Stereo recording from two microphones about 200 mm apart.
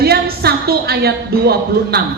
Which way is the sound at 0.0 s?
50° right (ahead or behind).